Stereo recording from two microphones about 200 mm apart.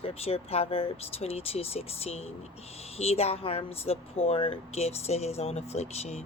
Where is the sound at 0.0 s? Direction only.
30° left (ahead or behind).